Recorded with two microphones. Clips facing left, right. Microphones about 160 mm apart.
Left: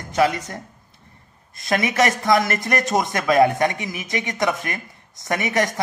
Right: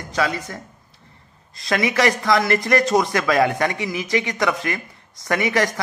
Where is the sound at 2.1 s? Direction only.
20° left (ahead or behind).